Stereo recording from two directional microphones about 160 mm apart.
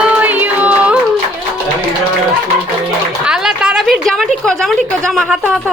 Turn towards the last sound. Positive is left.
turn(degrees=0)  # may be behind; listen again after turning